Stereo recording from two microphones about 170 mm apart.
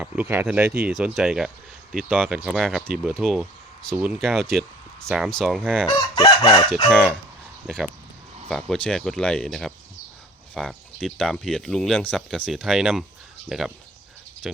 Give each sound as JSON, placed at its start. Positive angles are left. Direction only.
{"t": 0.0, "sound": "speech", "side_deg": -10}
{"t": 6.1, "sound": "chicken", "side_deg": 30}
{"t": 6.9, "sound": "speech", "side_deg": 0}